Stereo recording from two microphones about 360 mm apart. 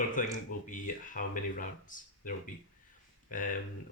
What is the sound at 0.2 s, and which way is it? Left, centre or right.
Speech, left.